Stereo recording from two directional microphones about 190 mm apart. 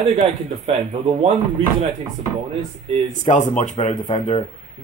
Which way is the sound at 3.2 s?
40° left (ahead or behind).